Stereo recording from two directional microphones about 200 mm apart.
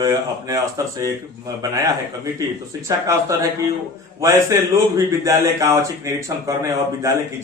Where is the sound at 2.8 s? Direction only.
15° right (ahead or behind).